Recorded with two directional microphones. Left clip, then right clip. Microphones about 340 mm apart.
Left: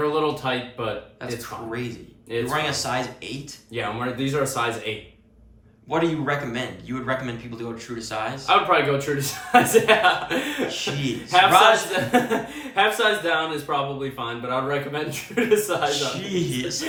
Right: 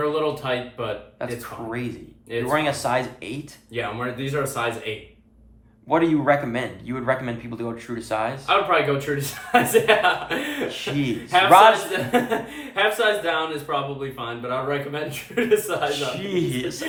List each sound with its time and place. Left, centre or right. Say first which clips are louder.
0.0 s speech: left 1 dB; centre
1.2 s speech: right 1 dB; centre
3.8 s speech: left 1 dB; centre
5.9 s speech: right 4 dB; centre
8.4 s speech: left 2 dB; centre
10.7 s a man's voice: right 1 dB; centre
11.9 s speech: left 1 dB; centre
16.2 s speech: right 2 dB; centre